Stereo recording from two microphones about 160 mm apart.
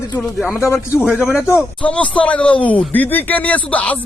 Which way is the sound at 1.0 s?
5° right (ahead or behind).